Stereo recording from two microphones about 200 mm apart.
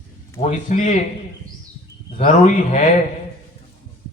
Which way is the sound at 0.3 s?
35° left (ahead or behind).